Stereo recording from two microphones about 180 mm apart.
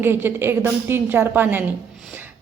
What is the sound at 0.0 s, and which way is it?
A woman's voice, 10° right (ahead or behind).